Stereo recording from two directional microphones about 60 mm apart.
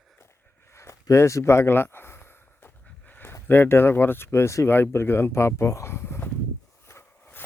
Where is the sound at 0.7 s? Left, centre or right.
Left.